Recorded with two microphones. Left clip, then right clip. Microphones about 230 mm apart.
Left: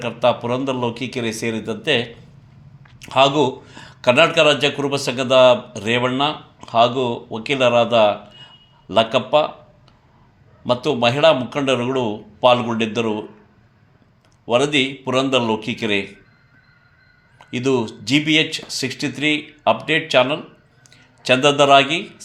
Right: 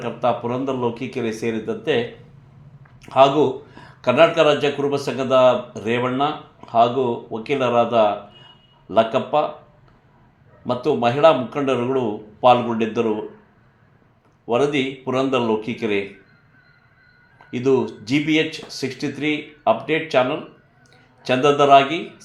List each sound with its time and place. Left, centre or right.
0.0 s speech: left
10.7 s speech: left
14.4 s speech: left
17.3 s a man's voice: left